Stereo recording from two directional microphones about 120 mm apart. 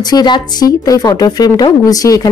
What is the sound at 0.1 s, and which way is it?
A woman's voice, 35° left (ahead or behind).